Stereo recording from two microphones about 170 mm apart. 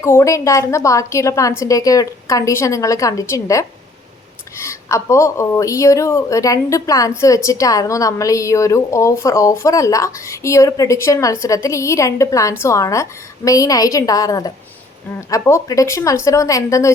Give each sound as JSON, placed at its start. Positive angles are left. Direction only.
{"t": 0.0, "sound": "a woman's voice", "side_deg": 15}